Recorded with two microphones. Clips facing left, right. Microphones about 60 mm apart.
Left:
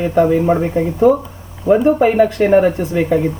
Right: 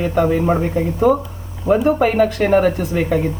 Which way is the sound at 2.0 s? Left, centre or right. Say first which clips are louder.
Left 3 dB; centre.